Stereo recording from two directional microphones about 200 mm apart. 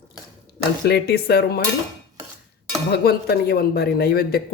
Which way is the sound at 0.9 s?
50° left (ahead or behind).